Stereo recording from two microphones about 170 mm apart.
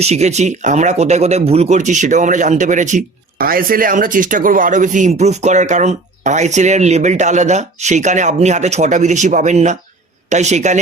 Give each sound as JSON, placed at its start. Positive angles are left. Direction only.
{"t": 0.0, "sound": "speech", "side_deg": -40}